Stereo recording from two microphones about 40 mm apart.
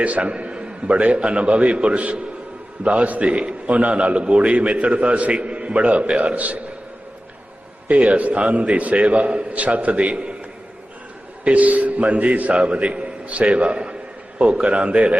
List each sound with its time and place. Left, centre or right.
0.0 s a man's voice: right
7.9 s a man's voice: right
11.4 s a man's voice: right